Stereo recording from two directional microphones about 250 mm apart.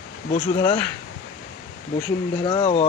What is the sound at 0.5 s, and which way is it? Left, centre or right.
Speech, centre.